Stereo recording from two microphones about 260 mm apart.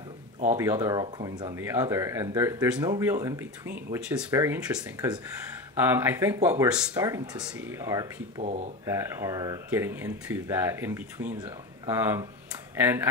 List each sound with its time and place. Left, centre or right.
0.6 s speech: centre
8.4 s speech: right
8.8 s speech: centre